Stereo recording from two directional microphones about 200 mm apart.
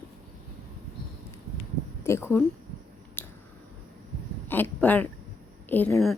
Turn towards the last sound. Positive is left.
turn(degrees=10)  # may be behind; listen again after turning